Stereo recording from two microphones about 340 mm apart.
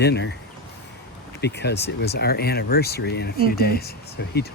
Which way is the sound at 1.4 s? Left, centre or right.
Left.